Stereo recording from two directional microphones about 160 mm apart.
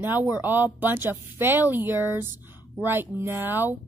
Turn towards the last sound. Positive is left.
turn(degrees=-10)  # may be behind; listen again after turning